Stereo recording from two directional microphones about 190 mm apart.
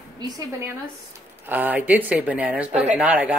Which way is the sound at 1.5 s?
10° right (ahead or behind).